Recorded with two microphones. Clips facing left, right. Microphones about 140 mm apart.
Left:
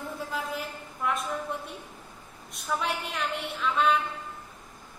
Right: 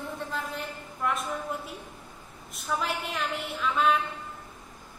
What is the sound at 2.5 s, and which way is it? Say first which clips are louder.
A woman's voice: even; centre (ahead or behind).